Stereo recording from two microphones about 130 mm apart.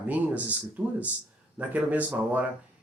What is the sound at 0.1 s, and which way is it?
Speech, 10° right (ahead or behind).